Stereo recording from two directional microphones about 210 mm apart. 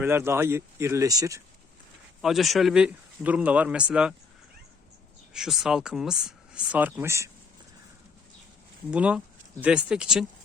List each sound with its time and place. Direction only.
0.0 s speech: 10° right (ahead or behind)
2.2 s speech: centre (ahead or behind)
5.3 s speech: centre (ahead or behind)
8.9 s speech: 5° right (ahead or behind)